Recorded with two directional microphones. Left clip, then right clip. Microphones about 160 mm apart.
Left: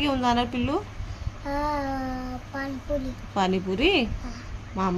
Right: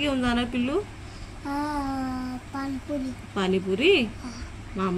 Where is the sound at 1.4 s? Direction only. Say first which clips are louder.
Left 2 dB; 15° left (ahead or behind).